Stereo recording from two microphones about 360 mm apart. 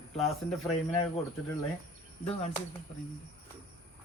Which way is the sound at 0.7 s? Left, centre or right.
Centre.